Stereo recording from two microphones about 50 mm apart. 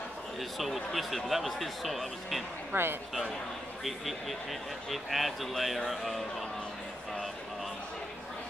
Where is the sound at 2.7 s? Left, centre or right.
Right.